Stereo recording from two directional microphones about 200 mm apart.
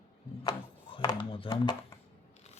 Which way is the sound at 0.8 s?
25° left (ahead or behind).